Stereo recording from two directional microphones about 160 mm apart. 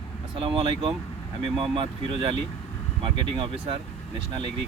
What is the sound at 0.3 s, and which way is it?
Speech, 35° right (ahead or behind).